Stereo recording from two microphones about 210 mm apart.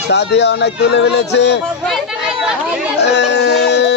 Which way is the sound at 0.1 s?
55° left (ahead or behind).